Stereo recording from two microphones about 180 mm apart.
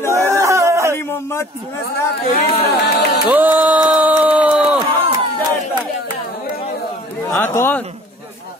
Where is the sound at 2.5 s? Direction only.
60° left (ahead or behind).